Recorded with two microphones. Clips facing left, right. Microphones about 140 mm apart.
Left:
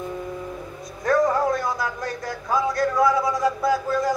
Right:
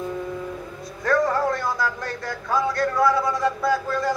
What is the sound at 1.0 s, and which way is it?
Music, 20° left (ahead or behind).